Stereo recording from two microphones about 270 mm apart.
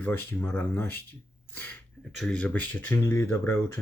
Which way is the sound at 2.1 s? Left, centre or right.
Centre.